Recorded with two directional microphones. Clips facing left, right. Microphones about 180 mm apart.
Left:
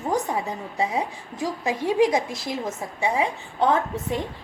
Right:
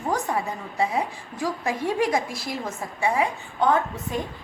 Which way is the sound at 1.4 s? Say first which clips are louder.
Left 1 dB; 20° left (ahead or behind).